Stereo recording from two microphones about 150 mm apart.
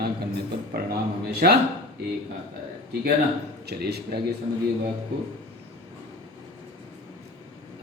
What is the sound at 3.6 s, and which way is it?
Speech, 90° right.